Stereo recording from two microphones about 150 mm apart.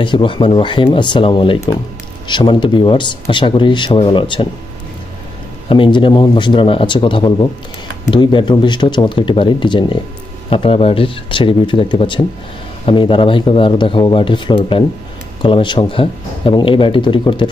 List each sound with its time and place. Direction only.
0.0 s speech: 35° left (ahead or behind)
5.7 s speech: 35° left (ahead or behind)